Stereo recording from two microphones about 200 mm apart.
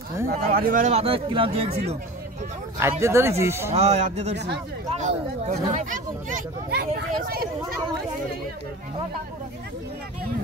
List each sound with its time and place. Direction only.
0.5 s speech: 45° right (ahead or behind); by 1.8 s 30° right (ahead or behind)
2.8 s speech: 15° right (ahead or behind)
3.7 s speech: 35° right (ahead or behind)
6.7 s speech: 50° right (ahead or behind)